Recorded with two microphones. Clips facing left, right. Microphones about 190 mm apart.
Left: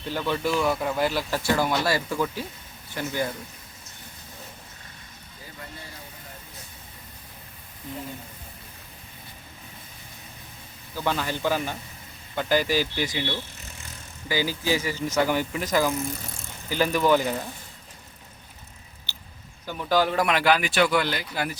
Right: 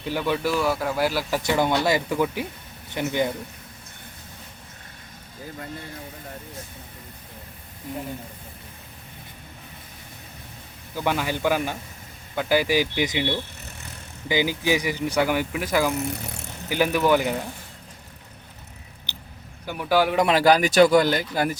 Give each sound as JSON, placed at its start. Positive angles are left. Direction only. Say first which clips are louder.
{"t": 0.0, "sound": "speech", "louder": "right 2 dB", "side_deg": -10}
{"t": 1.4, "sound": "speech", "louder": "right 2 dB", "side_deg": -20}
{"t": 10.9, "sound": "speech", "louder": "right 2 dB", "side_deg": -15}
{"t": 16.0, "sound": "speech", "louder": "right 3 dB", "side_deg": -70}
{"t": 16.6, "sound": "speech", "louder": "right 1 dB", "side_deg": -10}
{"t": 19.1, "sound": "a sound", "louder": "right 4 dB", "side_deg": -15}
{"t": 19.6, "sound": "speech", "louder": "right 2 dB", "side_deg": -10}
{"t": 20.2, "sound": "speech", "louder": "right 4 dB", "side_deg": -35}